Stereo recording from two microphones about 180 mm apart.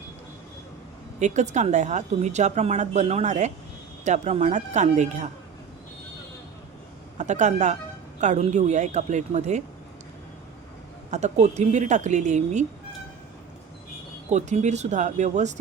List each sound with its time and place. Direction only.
1.2 s a woman's voice: 40° right (ahead or behind)
7.2 s a woman's voice: 40° right (ahead or behind)
11.1 s a woman's voice: 40° right (ahead or behind)
14.3 s a woman's voice: 40° right (ahead or behind)